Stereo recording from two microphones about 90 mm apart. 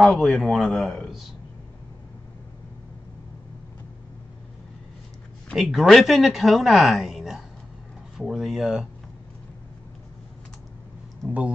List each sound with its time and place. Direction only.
0.0 s speech: centre (ahead or behind)
5.6 s speech: centre (ahead or behind)
11.2 s speech: 15° right (ahead or behind)